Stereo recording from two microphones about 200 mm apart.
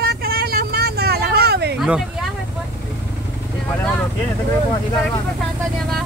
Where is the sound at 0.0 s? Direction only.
50° right (ahead or behind).